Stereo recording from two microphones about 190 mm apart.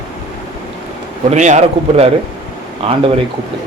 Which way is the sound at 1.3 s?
40° right (ahead or behind).